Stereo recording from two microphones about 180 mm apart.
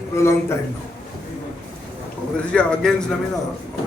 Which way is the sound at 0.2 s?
15° left (ahead or behind).